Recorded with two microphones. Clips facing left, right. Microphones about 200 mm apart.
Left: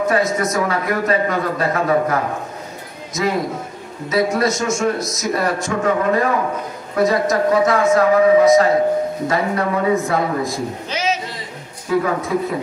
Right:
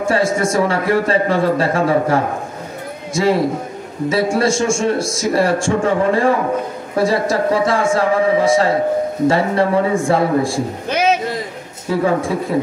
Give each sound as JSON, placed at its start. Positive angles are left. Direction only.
{"t": 0.0, "sound": "a man's voice", "side_deg": -30}
{"t": 10.9, "sound": "a sound", "side_deg": -55}
{"t": 11.9, "sound": "a man's voice", "side_deg": -30}